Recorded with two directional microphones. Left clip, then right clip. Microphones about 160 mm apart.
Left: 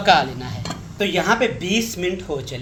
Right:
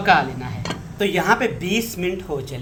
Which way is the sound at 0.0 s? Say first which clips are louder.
Left 1 dB; 30° left (ahead or behind).